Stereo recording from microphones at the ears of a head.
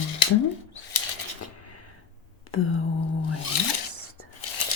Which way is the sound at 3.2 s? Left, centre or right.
Left.